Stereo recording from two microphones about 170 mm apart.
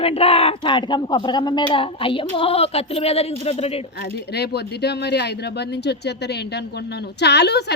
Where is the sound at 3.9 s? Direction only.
75° left (ahead or behind).